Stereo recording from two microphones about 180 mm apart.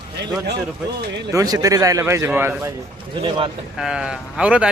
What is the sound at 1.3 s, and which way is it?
Speech, 20° right (ahead or behind).